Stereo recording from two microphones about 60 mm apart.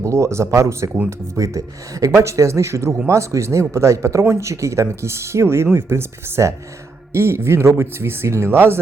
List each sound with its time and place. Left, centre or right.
0.0 s speech: right